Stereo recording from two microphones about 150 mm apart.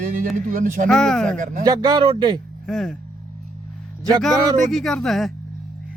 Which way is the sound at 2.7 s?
5° left (ahead or behind).